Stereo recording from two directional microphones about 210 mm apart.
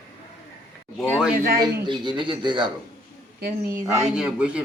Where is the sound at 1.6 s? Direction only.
20° right (ahead or behind).